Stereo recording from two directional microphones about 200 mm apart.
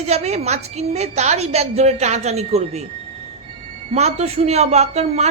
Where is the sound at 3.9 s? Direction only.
35° right (ahead or behind).